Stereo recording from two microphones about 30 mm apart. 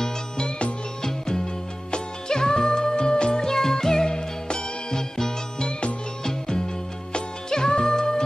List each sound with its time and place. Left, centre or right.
1.0 s music: centre
3.4 s music: centre
5.7 s music: left
7.4 s music: left